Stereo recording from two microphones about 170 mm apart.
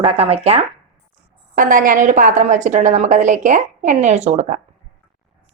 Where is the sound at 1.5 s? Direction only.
50° right (ahead or behind).